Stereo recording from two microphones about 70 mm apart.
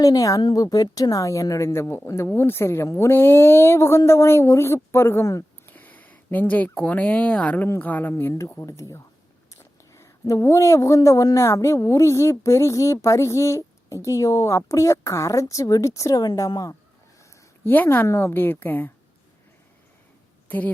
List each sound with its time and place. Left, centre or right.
0.0 s speech: left
5.6 s speech: left
8.6 s speech: left
18.0 s speech: left
18.3 s speech: left